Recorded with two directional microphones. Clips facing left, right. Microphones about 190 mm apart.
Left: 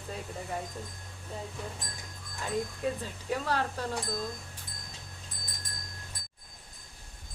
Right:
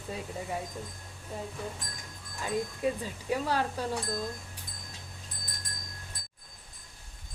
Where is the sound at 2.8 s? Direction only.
10° right (ahead or behind).